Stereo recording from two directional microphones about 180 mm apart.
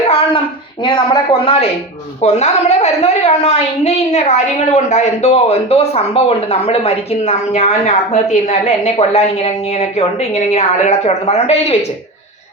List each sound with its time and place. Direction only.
0.1 s speech: 30° left (ahead or behind)